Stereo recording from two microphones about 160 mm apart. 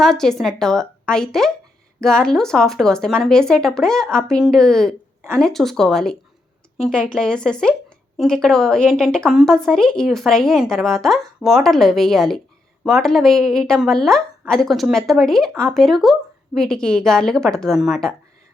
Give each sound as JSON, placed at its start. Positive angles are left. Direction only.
{"t": 0.0, "sound": "a woman's voice", "side_deg": 5}